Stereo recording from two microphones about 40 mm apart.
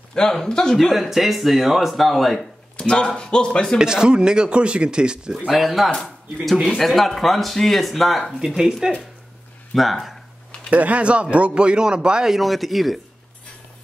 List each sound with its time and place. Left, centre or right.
0.1 s speech: centre
0.9 s speech: centre
2.8 s speech: left
3.7 s speech: centre
5.5 s speech: centre
8.5 s speech: centre
9.8 s speech: centre
10.7 s speech: right
12.3 s speech: centre